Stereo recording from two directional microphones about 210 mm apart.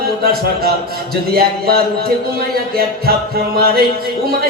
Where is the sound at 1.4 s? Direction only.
45° right (ahead or behind).